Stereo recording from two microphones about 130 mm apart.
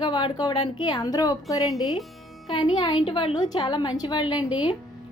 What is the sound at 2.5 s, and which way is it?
A woman's voice, 40° left (ahead or behind).